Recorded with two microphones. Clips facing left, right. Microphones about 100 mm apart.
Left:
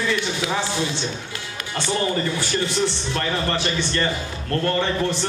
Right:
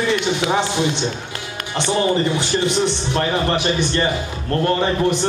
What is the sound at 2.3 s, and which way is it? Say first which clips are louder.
A man's voice: right 4 dB; 20° right (ahead or behind).